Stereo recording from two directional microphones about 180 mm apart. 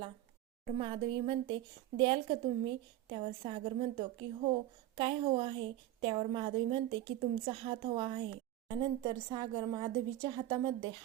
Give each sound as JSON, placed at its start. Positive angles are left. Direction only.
{"t": 0.6, "sound": "a woman's voice", "side_deg": -30}